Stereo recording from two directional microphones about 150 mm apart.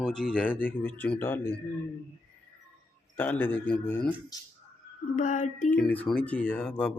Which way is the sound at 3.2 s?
10° left (ahead or behind).